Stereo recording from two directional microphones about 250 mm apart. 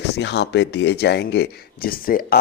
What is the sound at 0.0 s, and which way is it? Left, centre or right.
Speech, left.